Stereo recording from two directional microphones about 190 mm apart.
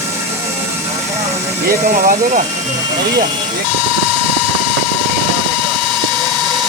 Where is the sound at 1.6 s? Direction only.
45° right (ahead or behind).